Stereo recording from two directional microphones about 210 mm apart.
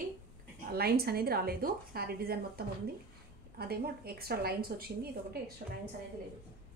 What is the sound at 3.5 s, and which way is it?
A woman's voice, 50° right (ahead or behind).